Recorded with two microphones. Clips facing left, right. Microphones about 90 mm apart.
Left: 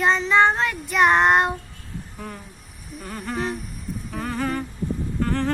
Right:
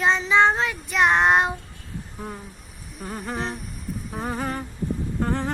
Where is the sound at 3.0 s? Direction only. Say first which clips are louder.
Left 2 dB; 10° right (ahead or behind).